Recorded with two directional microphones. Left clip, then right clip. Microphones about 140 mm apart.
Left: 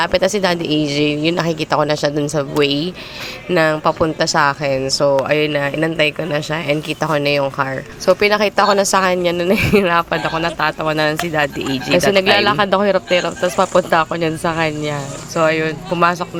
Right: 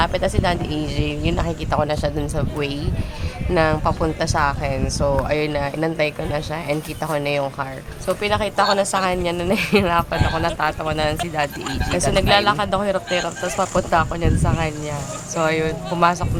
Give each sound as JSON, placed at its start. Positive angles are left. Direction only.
{"t": 0.0, "sound": "speech", "side_deg": 45}
{"t": 14.2, "sound": "speech", "side_deg": 25}